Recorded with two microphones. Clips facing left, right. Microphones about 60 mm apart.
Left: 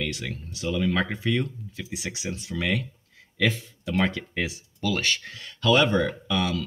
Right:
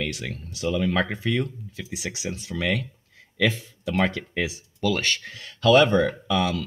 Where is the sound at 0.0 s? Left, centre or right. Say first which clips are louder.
Right 1 dB; centre.